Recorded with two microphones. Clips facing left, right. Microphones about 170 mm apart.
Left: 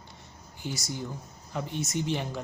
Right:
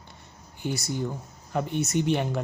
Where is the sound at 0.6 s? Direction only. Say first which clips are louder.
Right 6 dB; 60° right (ahead or behind).